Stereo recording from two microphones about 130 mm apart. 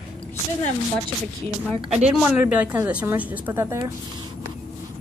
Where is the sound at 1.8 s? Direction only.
5° right (ahead or behind).